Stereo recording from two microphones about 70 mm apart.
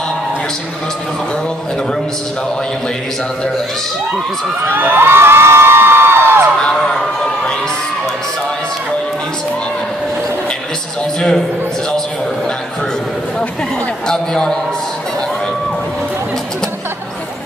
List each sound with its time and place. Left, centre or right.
4.6 s a sound: right
11.1 s a man's voice: centre
14.0 s a man's voice: centre